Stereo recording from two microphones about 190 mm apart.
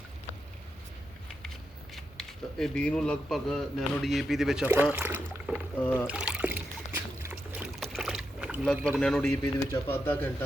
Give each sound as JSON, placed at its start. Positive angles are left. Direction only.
{"t": 2.0, "sound": "speech", "side_deg": 0}
{"t": 5.8, "sound": "speech", "side_deg": 10}
{"t": 6.1, "sound": "boat", "side_deg": -5}
{"t": 8.9, "sound": "speech", "side_deg": 5}
{"t": 9.4, "sound": "speech", "side_deg": 15}